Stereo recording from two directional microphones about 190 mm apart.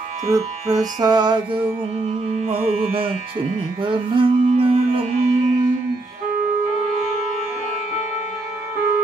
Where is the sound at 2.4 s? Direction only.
30° right (ahead or behind).